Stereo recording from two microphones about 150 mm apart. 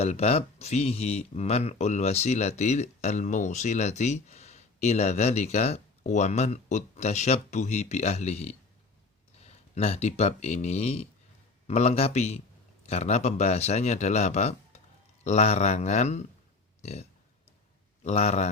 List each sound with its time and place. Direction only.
0.0 s speech: 45° left (ahead or behind)